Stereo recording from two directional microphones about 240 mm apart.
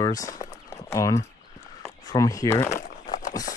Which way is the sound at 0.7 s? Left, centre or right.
Centre.